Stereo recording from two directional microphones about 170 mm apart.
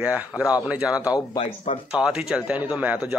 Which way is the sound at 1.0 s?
25° left (ahead or behind).